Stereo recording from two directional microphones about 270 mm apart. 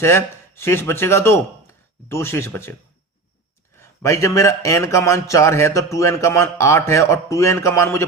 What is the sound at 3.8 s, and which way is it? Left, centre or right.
A man's voice, centre.